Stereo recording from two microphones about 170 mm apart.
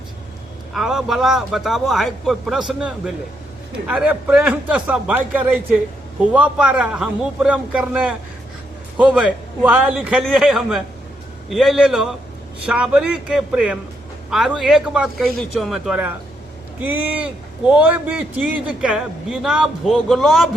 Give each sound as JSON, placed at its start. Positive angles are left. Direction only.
{"t": 0.7, "sound": "a man's voice", "side_deg": 0}